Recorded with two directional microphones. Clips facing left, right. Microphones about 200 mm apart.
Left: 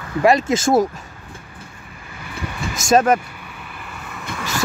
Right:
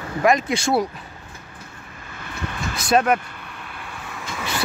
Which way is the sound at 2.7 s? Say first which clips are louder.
Left 3 dB; 45° left (ahead or behind).